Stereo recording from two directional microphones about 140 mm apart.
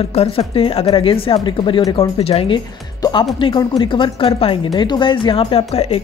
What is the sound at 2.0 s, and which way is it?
Speech, 45° left (ahead or behind).